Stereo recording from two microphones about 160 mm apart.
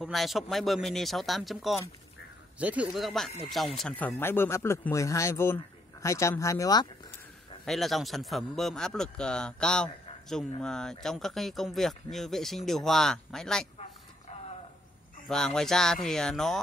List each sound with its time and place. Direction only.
0.0 s speech: centre (ahead or behind); by 6.9 s 25° left (ahead or behind)
7.6 s speech: centre (ahead or behind)
15.2 s speech: 5° left (ahead or behind)